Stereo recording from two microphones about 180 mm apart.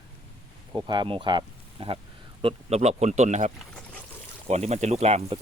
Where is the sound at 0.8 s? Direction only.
25° right (ahead or behind).